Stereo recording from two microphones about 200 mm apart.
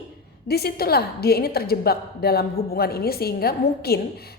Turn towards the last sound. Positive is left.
turn(degrees=50)  # may be behind; listen again after turning